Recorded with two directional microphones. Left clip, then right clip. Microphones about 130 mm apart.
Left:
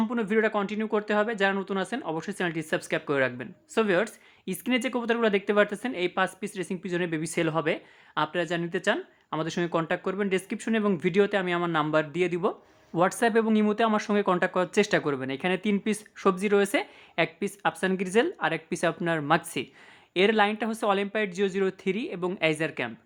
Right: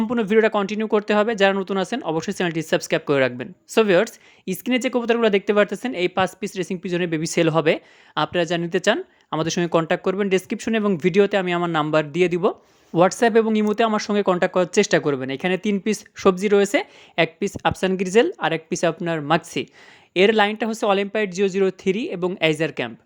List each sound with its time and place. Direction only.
0.1 s speech: 40° right (ahead or behind)